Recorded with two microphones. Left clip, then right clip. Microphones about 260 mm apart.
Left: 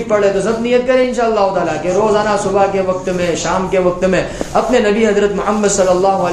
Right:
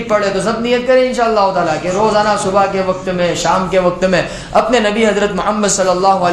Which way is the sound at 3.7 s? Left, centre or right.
Right.